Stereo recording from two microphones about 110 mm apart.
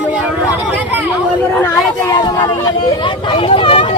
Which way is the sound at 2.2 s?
40° left (ahead or behind).